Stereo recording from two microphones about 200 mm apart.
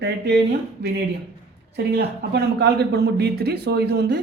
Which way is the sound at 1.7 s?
55° right (ahead or behind).